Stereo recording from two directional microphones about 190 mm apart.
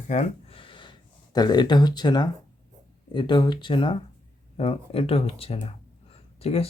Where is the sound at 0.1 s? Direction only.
35° left (ahead or behind).